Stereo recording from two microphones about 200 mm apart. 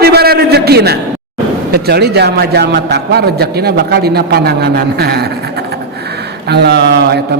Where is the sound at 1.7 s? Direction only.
55° right (ahead or behind).